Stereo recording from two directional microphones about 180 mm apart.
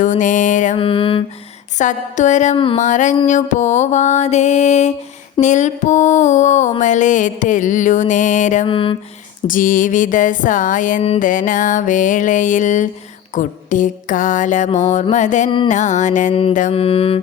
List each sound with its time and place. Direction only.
0.0 s music: 45° left (ahead or behind)
0.8 s mantra: 30° left (ahead or behind)
1.8 s music: 45° left (ahead or behind)
8.6 s a sound: 30° left (ahead or behind)
9.5 s music: 50° left (ahead or behind)
15.4 s a sound: 25° left (ahead or behind)
15.7 s music: 40° left (ahead or behind)
16.3 s music: 30° left (ahead or behind)